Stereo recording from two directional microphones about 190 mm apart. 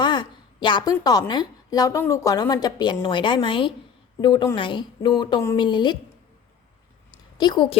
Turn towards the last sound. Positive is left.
turn(degrees=25)  # may be behind; listen again after turning